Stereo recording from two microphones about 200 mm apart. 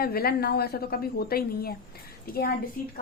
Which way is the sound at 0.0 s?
50° left (ahead or behind).